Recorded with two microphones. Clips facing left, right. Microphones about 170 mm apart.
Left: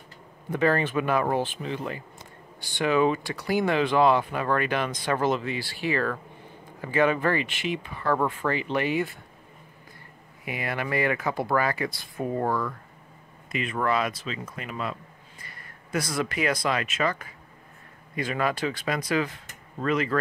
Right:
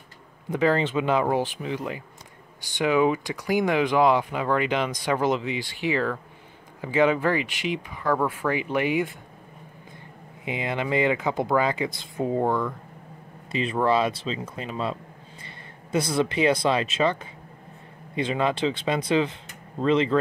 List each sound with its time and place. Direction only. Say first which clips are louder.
0.5 s speech: right 1 dB; 15° right (ahead or behind)
10.4 s speech: right 3 dB; 20° right (ahead or behind)
13.5 s speech: right 4 dB; 30° right (ahead or behind)